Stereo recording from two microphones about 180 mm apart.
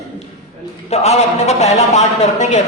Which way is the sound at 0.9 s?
35° left (ahead or behind).